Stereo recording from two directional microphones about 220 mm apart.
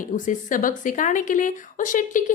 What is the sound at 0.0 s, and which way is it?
Speech, 35° left (ahead or behind).